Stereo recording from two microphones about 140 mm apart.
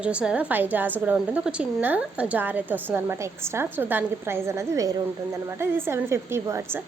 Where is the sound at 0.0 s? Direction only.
10° right (ahead or behind).